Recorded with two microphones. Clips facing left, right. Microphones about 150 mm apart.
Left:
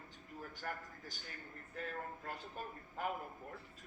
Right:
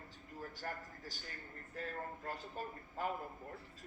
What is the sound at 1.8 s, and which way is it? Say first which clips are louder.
A man's voice: right 1 dB; 35° right (ahead or behind).